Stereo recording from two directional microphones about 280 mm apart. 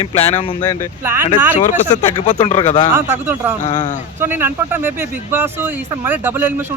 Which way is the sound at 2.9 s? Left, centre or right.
Centre.